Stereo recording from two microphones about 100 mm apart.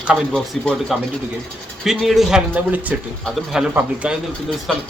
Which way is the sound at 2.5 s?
15° right (ahead or behind).